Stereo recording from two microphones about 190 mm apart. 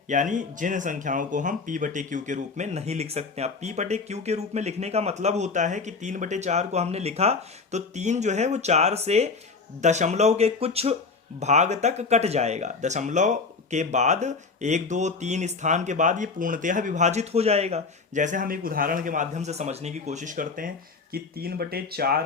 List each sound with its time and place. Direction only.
0.1 s speech: 40° right (ahead or behind)